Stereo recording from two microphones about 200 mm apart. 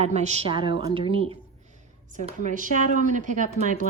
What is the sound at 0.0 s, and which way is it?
Speech, 35° right (ahead or behind).